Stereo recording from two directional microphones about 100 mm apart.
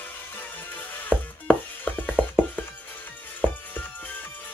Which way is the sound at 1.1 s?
15° right (ahead or behind).